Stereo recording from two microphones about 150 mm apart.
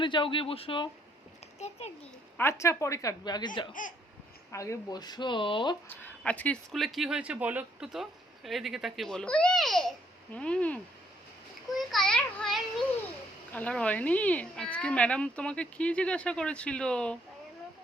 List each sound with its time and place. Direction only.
0.0 s a child's voice: 35° left (ahead or behind)
2.4 s a woman's voice: 20° left (ahead or behind)
4.5 s a woman's voice: 20° left (ahead or behind)
5.9 s speech: 10° left (ahead or behind)
11.9 s a child's voice: 5° left (ahead or behind)